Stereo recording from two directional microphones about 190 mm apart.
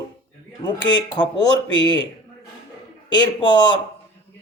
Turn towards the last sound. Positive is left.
turn(degrees=25)  # may be behind; listen again after turning